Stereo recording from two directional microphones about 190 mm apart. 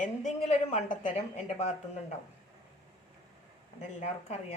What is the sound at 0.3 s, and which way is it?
A woman's voice, 35° left (ahead or behind).